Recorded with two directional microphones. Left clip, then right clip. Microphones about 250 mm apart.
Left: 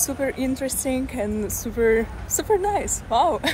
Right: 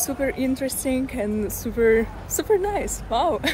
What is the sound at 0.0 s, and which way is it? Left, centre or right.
Speech, centre.